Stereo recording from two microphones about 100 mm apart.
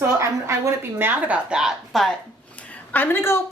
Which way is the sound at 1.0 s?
15° right (ahead or behind).